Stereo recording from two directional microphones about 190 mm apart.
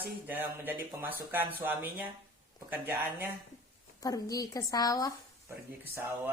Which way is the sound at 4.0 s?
20° left (ahead or behind).